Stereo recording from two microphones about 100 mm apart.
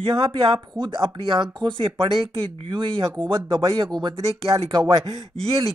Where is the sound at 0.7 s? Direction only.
50° right (ahead or behind).